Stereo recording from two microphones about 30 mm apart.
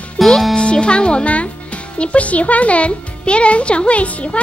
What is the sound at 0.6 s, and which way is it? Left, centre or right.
Speech, left.